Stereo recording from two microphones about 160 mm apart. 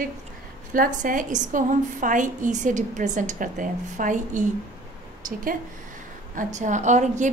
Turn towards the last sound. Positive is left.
turn(degrees=-50)  # may be behind; listen again after turning